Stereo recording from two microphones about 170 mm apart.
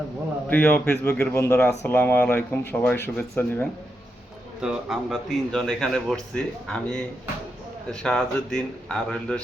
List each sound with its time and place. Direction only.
0.4 s speech: 10° left (ahead or behind)
4.6 s a man's voice: centre (ahead or behind)